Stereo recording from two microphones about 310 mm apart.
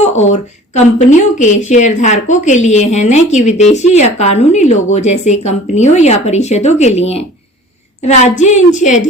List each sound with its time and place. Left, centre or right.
0.0 s a woman's voice: left